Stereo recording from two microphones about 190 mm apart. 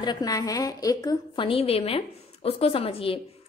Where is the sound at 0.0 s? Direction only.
20° left (ahead or behind).